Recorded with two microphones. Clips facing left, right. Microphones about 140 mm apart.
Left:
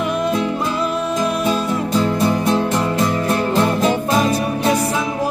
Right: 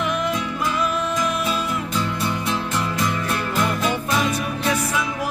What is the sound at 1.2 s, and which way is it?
Music, 35° left (ahead or behind).